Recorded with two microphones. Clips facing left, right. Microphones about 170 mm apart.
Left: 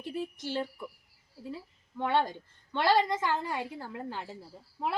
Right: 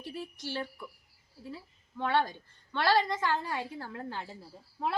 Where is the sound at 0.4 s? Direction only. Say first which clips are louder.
Left 2 dB; 20° left (ahead or behind).